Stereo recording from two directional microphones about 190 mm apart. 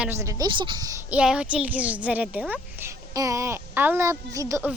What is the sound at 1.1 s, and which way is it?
A woman's voice, 5° right (ahead or behind).